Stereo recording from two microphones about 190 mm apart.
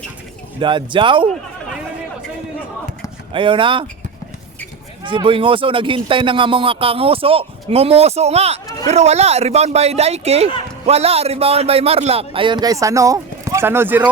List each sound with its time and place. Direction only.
0.6 s a man's voice: 25° right (ahead or behind)
3.3 s a man's voice: 25° right (ahead or behind)
5.0 s a man's voice: 25° right (ahead or behind); by 14.0 s 10° right (ahead or behind)